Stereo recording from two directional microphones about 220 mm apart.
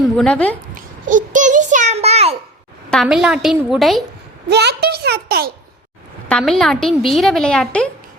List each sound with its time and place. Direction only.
0.0 s a woman's voice: 5° left (ahead or behind)
1.0 s a sound: 35° right (ahead or behind)
2.9 s a woman's voice: centre (ahead or behind)
4.4 s a child's voice: 50° right (ahead or behind)
6.2 s a woman's voice: 5° left (ahead or behind)